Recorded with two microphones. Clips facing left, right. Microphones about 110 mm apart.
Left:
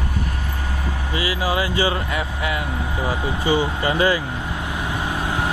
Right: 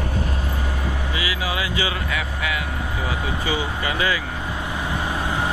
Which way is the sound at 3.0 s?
30° left (ahead or behind).